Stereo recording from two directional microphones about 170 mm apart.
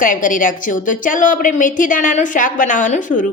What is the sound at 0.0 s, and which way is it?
A woman's voice, 50° left (ahead or behind).